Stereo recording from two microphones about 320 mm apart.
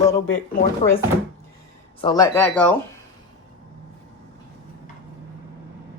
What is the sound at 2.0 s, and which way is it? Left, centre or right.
Speech, centre.